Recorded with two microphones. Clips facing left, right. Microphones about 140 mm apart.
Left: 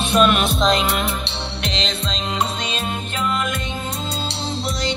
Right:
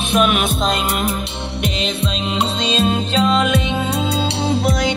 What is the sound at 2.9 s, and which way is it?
Music, 90° right.